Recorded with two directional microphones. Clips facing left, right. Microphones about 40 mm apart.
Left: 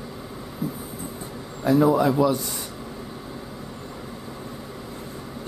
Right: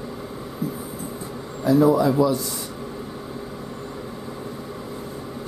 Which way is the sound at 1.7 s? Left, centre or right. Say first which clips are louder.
Right 2 dB; left.